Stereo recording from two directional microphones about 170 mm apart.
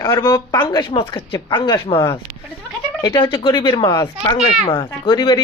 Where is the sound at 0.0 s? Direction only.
20° left (ahead or behind).